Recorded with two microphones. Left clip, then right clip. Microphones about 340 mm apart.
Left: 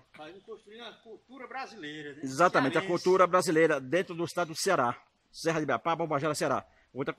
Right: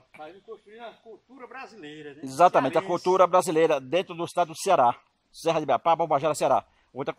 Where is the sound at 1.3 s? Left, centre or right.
Centre.